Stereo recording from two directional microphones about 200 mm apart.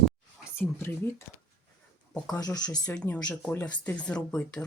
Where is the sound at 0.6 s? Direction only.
10° left (ahead or behind).